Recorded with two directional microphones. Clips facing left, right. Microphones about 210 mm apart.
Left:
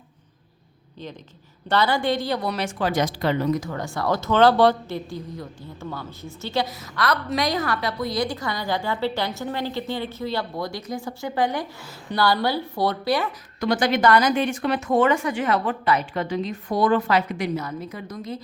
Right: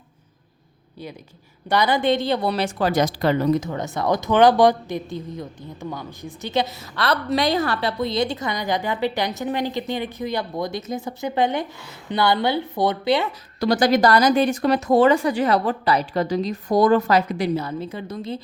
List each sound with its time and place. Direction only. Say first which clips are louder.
1.7 s speech: right 2 dB; 15° right (ahead or behind); by 3.5 s 40° right (ahead or behind)
3.5 s speech: right 3 dB; 20° right (ahead or behind)
13.7 s speech: right 2 dB; 35° right (ahead or behind)